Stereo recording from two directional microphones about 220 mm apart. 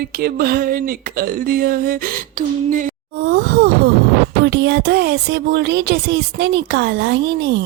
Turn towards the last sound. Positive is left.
turn(degrees=-50)  # may be behind; listen again after turning